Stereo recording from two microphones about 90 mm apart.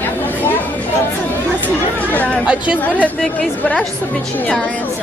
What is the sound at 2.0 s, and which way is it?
Speech, 15° left (ahead or behind).